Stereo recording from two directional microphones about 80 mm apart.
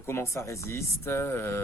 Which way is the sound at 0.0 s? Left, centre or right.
Left.